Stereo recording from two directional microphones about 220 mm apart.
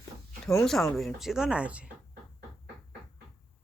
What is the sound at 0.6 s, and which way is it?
Speech, centre (ahead or behind).